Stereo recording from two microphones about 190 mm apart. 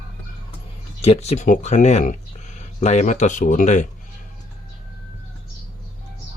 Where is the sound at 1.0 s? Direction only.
35° left (ahead or behind).